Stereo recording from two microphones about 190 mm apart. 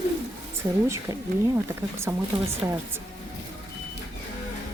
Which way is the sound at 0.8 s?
15° right (ahead or behind).